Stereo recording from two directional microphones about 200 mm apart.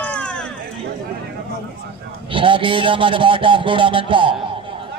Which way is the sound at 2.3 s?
25° right (ahead or behind).